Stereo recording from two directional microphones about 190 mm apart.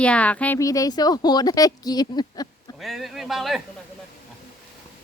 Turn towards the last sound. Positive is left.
turn(degrees=0)  # may be behind; listen again after turning